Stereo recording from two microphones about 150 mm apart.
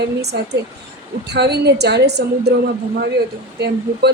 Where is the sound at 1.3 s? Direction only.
90° right.